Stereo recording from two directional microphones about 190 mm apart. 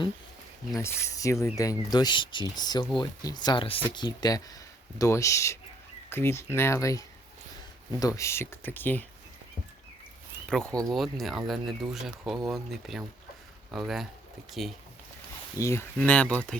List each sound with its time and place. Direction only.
0.8 s speech: 15° left (ahead or behind)
10.5 s speech: 5° left (ahead or behind)
15.5 s speech: 15° left (ahead or behind)